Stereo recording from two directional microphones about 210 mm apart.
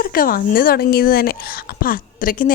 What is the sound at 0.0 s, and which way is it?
A woman's voice, 45° left (ahead or behind).